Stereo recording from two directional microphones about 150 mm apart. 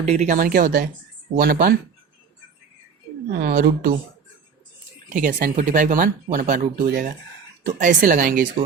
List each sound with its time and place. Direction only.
0.0 s speech: 55° right (ahead or behind); by 1.8 s 80° right
3.4 s speech: 90° right
5.1 s speech: 65° right (ahead or behind)